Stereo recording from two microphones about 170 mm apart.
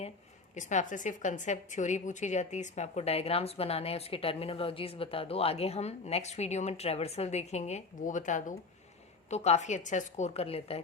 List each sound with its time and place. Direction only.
0.5 s a woman's voice: 45° left (ahead or behind)